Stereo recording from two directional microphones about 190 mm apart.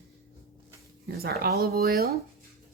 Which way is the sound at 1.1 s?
55° right (ahead or behind).